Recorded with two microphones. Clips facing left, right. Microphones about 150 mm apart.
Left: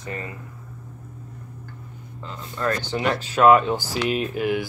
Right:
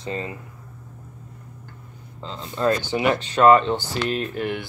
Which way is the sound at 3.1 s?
5° left (ahead or behind).